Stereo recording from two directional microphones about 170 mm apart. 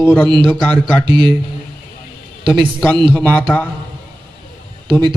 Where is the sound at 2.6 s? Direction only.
5° left (ahead or behind).